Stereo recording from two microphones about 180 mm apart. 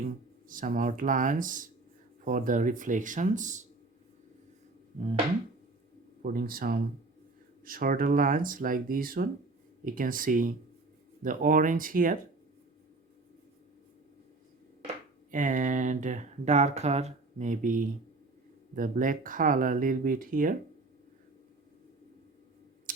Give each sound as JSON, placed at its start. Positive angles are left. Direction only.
{"t": 0.4, "sound": "speech", "side_deg": -50}
{"t": 6.2, "sound": "speech", "side_deg": -55}
{"t": 15.3, "sound": "speech", "side_deg": -45}